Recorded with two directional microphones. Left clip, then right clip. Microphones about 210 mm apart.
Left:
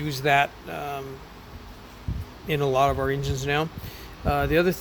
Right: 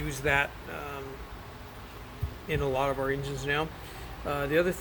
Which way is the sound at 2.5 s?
50° left (ahead or behind).